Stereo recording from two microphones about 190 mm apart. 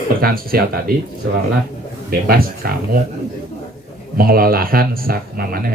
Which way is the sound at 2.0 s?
50° right (ahead or behind).